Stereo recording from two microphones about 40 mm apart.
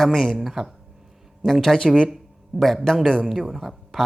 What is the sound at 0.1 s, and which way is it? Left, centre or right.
Speech, centre.